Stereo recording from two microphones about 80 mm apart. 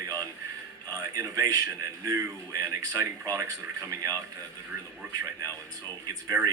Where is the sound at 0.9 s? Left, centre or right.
Right.